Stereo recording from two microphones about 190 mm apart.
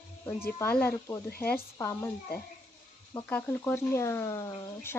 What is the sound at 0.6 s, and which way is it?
Speech, 10° left (ahead or behind).